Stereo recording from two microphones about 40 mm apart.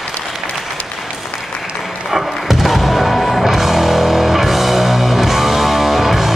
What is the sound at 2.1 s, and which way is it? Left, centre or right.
Music, centre.